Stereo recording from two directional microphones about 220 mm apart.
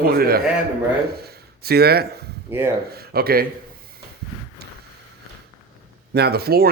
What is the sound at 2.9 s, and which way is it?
Speech, 45° right (ahead or behind).